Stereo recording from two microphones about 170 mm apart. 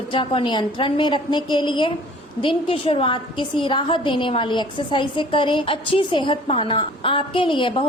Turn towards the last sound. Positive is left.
turn(degrees=30)  # may be behind; listen again after turning